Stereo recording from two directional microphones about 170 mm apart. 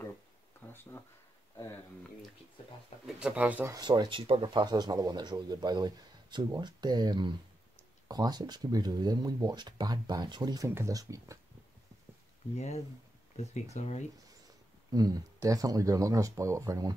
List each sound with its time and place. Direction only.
0.6 s a sound: 15° left (ahead or behind)
3.2 s speech: 5° right (ahead or behind)
3.7 s speech: 25° right (ahead or behind)
12.5 s speech: 40° left (ahead or behind)
14.9 s speech: 20° right (ahead or behind)